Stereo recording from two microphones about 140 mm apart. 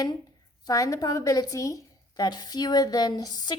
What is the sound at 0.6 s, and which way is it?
A woman's voice, 25° left (ahead or behind).